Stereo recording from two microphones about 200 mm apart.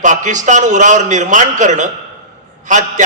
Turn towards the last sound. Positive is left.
turn(degrees=-40)  # may be behind; listen again after turning